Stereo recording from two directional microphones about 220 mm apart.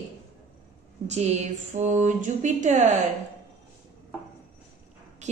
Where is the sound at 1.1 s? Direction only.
30° right (ahead or behind).